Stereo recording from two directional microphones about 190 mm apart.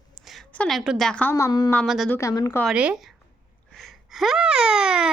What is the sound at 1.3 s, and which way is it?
Speech, 20° left (ahead or behind).